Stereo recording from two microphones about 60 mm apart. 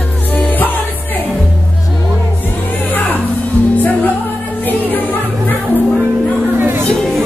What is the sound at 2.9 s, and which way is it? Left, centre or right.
Music, left.